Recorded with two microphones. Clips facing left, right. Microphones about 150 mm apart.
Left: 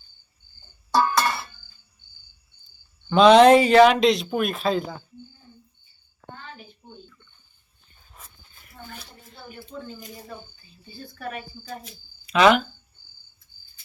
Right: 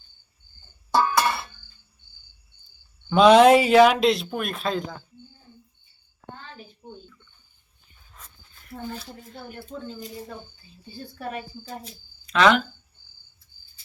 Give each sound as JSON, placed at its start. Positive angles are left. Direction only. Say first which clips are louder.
{"t": 0.9, "sound": "music", "louder": "even", "side_deg": -5}
{"t": 3.1, "sound": "speech", "louder": "left 1 dB", "side_deg": -5}
{"t": 8.1, "sound": "a sound", "louder": "left 1 dB", "side_deg": 10}
{"t": 9.7, "sound": "speech", "louder": "right 1 dB", "side_deg": -20}
{"t": 11.0, "sound": "speech", "louder": "right 1 dB", "side_deg": -30}
{"t": 12.2, "sound": "speech", "louder": "left 2 dB", "side_deg": 10}